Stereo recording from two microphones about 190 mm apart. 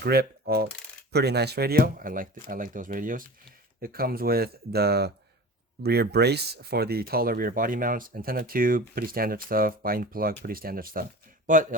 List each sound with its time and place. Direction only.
0.0 s coin: 55° right (ahead or behind)
1.1 s speech: 60° right (ahead or behind); by 11.6 s 45° right (ahead or behind)